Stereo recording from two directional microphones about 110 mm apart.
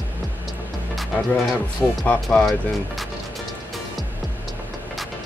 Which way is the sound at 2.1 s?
10° left (ahead or behind).